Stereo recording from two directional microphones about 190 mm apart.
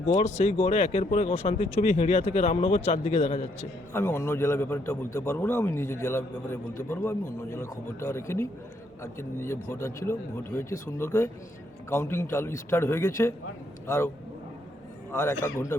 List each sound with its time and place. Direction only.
0.1 s speech: 35° left (ahead or behind)
3.9 s a man's voice: 15° left (ahead or behind)
15.1 s a man's voice: 15° left (ahead or behind)